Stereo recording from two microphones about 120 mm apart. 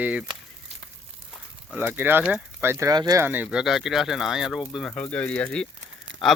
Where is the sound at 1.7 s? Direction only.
15° right (ahead or behind).